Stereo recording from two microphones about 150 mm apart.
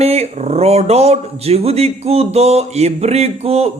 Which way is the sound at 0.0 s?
45° right (ahead or behind).